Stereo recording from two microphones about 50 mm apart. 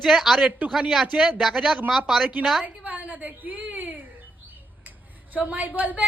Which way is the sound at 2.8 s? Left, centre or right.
Right.